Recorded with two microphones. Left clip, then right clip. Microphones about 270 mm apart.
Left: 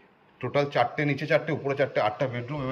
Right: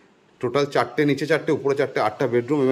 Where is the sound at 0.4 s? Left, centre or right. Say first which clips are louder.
Right 3 dB; centre.